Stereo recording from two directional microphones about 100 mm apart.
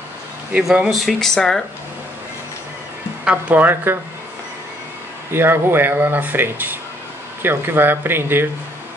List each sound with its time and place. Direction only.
0.5 s speech: 10° right (ahead or behind)
3.3 s speech: 15° right (ahead or behind)
5.3 s speech: 20° right (ahead or behind)